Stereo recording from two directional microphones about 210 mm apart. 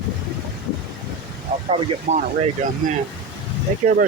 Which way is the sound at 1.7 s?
30° right (ahead or behind).